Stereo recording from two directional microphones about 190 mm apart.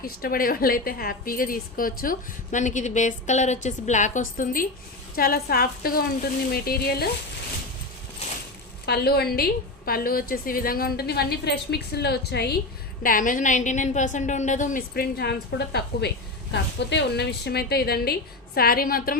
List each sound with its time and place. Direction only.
0.0 s a woman's voice: 50° left (ahead or behind)
8.9 s a woman's voice: 55° left (ahead or behind)
13.0 s a woman's voice: 45° left (ahead or behind)